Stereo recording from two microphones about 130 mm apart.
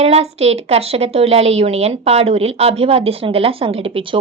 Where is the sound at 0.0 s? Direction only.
50° right (ahead or behind).